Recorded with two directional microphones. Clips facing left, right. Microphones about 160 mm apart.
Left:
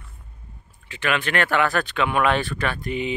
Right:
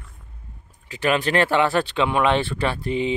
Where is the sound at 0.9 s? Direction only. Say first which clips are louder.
Right 4 dB; 35° right (ahead or behind).